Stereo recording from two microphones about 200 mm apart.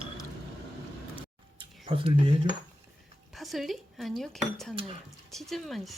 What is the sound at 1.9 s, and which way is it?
Speech, 25° right (ahead or behind).